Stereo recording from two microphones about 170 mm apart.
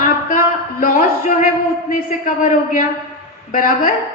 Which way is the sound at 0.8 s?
55° left (ahead or behind).